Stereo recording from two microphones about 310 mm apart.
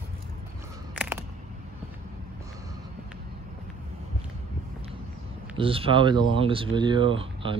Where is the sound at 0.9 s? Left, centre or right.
Centre.